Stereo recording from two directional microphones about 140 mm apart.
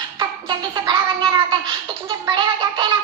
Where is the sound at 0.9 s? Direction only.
30° right (ahead or behind).